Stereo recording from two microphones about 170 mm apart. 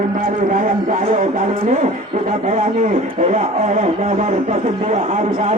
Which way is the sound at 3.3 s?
45° right (ahead or behind).